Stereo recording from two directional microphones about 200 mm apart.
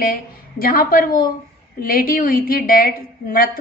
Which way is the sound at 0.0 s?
50° left (ahead or behind).